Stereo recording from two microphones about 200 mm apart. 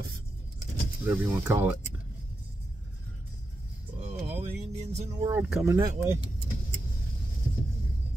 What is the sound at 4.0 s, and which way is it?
Music, 35° right (ahead or behind).